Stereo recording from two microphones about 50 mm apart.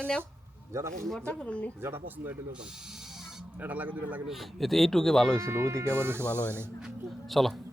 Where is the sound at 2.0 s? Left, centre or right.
Right.